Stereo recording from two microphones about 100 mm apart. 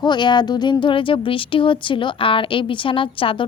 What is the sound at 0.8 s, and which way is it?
A woman's voice, 60° left (ahead or behind).